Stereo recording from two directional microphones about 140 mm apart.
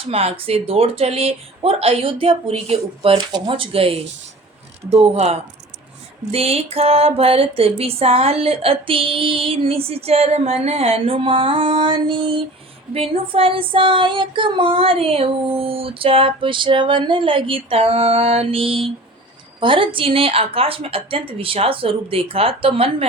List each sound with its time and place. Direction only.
0.0 s music: 45° right (ahead or behind)
12.9 s female singing: 45° right (ahead or behind)